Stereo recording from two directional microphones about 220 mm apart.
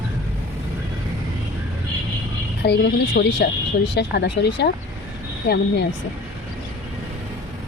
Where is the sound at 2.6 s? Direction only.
50° left (ahead or behind).